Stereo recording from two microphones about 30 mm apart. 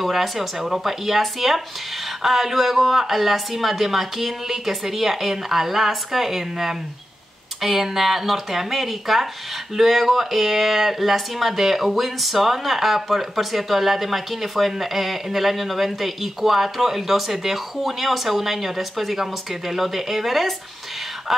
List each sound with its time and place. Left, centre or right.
0.0 s a woman's voice: centre